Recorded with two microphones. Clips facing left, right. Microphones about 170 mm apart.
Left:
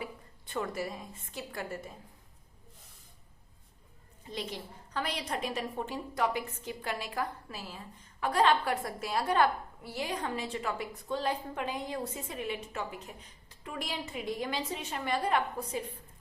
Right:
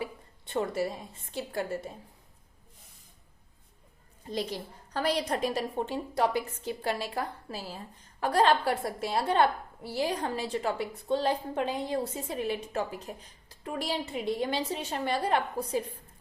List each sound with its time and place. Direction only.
0.0 s a woman's voice: 25° right (ahead or behind)
4.3 s a woman's voice: 35° right (ahead or behind)